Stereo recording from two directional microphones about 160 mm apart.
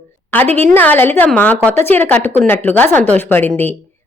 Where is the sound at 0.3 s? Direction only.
10° left (ahead or behind).